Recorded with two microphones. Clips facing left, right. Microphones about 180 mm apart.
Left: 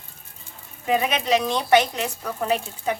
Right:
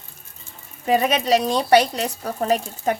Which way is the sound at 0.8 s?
45° right (ahead or behind).